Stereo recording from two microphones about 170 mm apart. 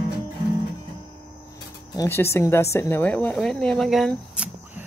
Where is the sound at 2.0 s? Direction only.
15° left (ahead or behind); by 4.5 s 5° right (ahead or behind).